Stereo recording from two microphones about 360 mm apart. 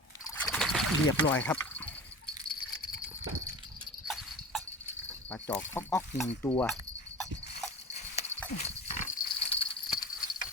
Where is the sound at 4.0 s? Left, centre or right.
Centre.